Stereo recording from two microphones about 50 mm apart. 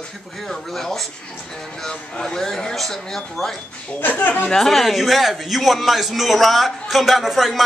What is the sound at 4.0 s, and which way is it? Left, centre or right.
Speech, left.